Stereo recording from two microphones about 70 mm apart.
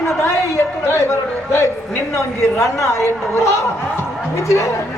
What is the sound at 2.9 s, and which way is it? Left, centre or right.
A woman's voice, left.